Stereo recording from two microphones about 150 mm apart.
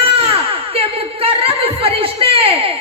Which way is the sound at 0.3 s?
40° right (ahead or behind).